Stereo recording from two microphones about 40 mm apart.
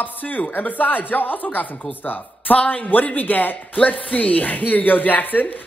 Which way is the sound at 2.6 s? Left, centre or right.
Left.